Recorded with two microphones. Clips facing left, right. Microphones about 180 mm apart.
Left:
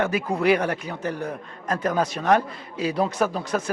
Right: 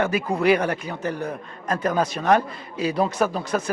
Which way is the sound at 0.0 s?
20° right (ahead or behind).